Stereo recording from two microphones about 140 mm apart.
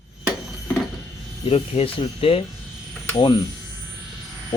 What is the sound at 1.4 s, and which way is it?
Speech, 45° left (ahead or behind).